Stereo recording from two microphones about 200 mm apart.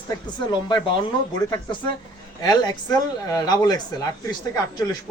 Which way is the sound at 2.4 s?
20° left (ahead or behind).